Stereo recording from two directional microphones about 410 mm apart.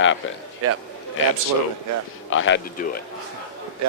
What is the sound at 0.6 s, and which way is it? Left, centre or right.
Speech, right.